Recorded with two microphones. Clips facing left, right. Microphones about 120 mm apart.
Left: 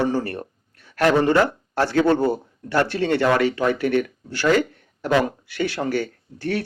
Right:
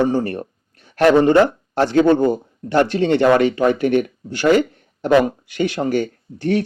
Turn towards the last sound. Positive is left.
turn(degrees=-20)  # may be behind; listen again after turning